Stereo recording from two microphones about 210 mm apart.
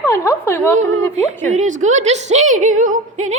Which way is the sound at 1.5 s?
35° right (ahead or behind).